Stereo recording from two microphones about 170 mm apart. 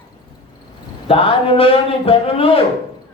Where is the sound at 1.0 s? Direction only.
30° left (ahead or behind).